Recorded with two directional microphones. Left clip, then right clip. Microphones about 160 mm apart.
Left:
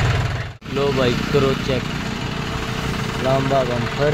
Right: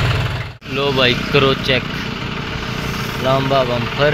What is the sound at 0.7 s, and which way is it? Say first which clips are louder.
Speech: right 4 dB; centre (ahead or behind).